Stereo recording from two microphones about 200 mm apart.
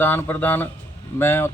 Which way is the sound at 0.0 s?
10° left (ahead or behind).